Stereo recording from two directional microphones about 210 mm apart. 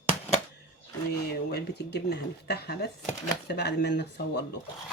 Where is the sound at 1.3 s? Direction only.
50° left (ahead or behind).